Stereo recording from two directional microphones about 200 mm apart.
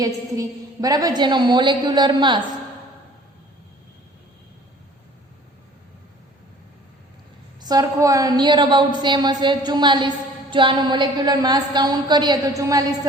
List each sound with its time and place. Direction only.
0.0 s a woman's voice: 20° right (ahead or behind)
7.6 s a woman's voice: 20° right (ahead or behind)